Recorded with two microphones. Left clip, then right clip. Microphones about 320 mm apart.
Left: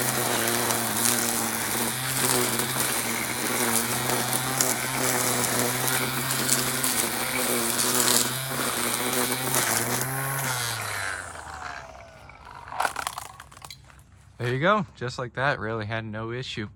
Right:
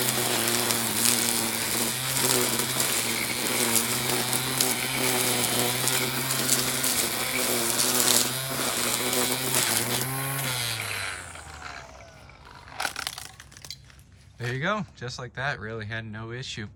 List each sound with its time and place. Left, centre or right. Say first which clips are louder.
0.0 s a sound: left 1 dB; centre
12.7 s crushing: left 4 dB; centre
14.4 s speech: left 6 dB; centre